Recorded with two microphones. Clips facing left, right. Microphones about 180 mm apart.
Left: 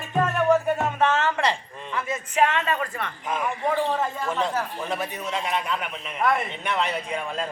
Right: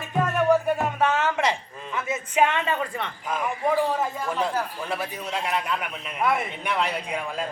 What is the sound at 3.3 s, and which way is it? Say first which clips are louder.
Speech: right 1 dB; 5° right (ahead or behind).